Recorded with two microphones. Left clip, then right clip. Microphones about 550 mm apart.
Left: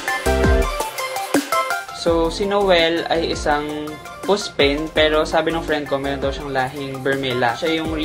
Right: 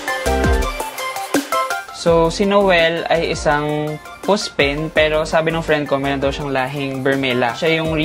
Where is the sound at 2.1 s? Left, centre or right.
Right.